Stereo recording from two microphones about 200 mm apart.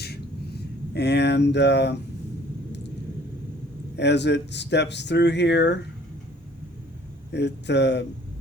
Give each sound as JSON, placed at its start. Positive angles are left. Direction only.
{"t": 0.9, "sound": "speech", "side_deg": 55}
{"t": 3.9, "sound": "speech", "side_deg": 60}
{"t": 7.3, "sound": "speech", "side_deg": 60}